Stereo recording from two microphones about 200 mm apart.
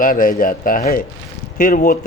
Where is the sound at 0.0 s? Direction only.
45° left (ahead or behind).